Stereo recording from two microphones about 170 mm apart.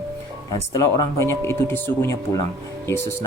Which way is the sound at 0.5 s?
20° left (ahead or behind).